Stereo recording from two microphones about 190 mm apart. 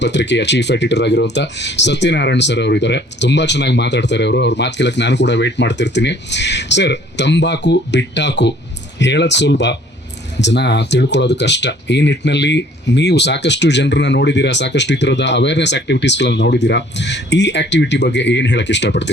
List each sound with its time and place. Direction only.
0.0 s speech: 65° left (ahead or behind)